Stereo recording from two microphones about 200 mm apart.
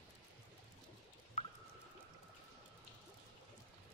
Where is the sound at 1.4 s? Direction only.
30° left (ahead or behind).